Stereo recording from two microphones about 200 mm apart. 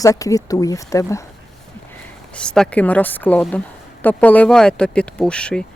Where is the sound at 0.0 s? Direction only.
15° left (ahead or behind).